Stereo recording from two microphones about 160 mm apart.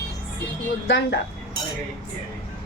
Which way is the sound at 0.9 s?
90° left.